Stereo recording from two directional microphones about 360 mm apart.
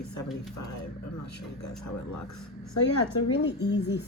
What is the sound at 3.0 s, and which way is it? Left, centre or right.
Speech, left.